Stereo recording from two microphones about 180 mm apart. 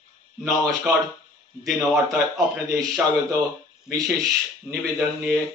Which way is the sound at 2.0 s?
20° right (ahead or behind).